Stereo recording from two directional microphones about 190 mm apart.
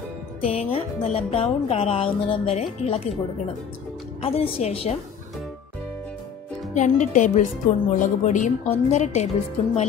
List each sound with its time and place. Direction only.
0.4 s a woman's voice: 30° left (ahead or behind)
4.2 s a woman's voice: 30° left (ahead or behind)
6.7 s a woman's voice: 40° left (ahead or behind)